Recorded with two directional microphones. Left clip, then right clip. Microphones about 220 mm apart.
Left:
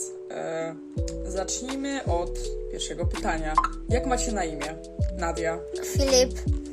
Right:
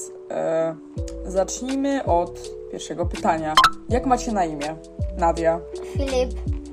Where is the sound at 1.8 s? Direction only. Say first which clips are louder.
Right 9 dB; 15° right (ahead or behind).